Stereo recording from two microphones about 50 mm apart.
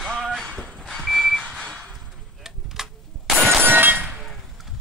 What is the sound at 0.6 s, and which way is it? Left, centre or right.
Reversing beeps, centre.